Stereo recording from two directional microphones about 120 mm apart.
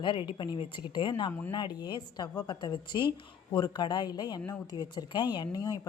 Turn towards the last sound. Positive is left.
turn(degrees=35)  # may be behind; listen again after turning